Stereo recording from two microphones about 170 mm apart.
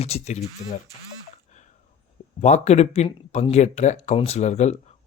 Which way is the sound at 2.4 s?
40° left (ahead or behind).